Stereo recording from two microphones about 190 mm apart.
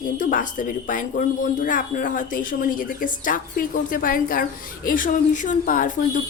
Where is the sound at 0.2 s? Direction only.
45° left (ahead or behind).